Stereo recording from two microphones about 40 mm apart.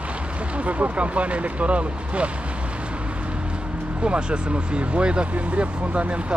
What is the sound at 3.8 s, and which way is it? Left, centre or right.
Speech, right.